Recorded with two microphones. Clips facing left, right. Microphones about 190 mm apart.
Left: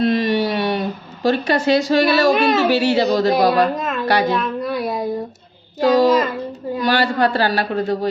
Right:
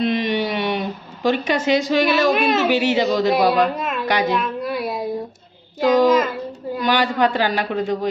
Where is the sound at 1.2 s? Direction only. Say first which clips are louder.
Left 2 dB; 15° right (ahead or behind).